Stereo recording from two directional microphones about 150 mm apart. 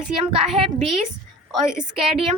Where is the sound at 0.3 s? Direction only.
40° right (ahead or behind).